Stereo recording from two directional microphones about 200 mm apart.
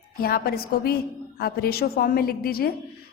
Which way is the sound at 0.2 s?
50° left (ahead or behind).